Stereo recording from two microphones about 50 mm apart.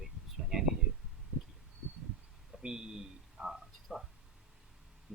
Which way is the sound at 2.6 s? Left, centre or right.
Centre.